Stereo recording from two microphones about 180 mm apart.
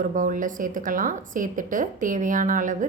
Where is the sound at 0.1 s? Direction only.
45° right (ahead or behind).